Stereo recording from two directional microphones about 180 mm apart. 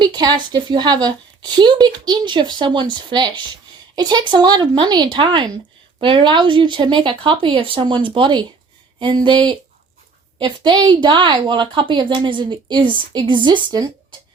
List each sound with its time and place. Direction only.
0.0 s a woman's voice: 25° right (ahead or behind)